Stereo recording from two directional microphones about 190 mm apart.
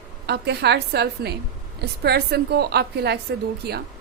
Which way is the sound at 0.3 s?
60° right (ahead or behind).